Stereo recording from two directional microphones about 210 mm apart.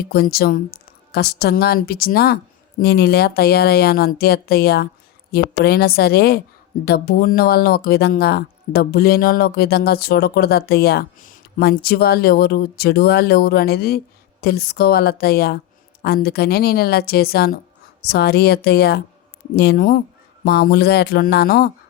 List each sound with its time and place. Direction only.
0.1 s speech: 45° left (ahead or behind)